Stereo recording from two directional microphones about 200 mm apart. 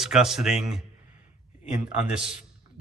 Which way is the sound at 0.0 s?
Centre (ahead or behind).